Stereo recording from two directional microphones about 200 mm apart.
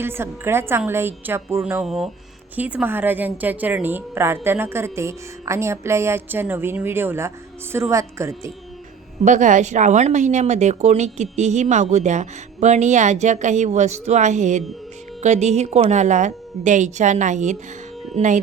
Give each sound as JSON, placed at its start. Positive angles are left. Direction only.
{"t": 0.0, "sound": "a woman's voice", "side_deg": -10}
{"t": 1.8, "sound": "a woman's voice", "side_deg": 0}
{"t": 9.2, "sound": "speech", "side_deg": -40}